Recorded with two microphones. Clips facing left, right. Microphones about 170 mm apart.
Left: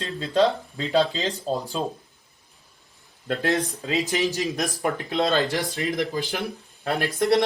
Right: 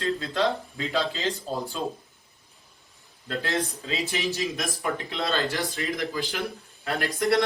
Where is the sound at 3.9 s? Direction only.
40° left (ahead or behind).